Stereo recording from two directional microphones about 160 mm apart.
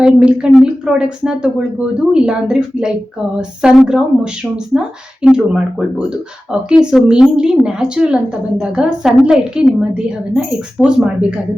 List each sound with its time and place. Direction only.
0.0 s speech: 5° right (ahead or behind)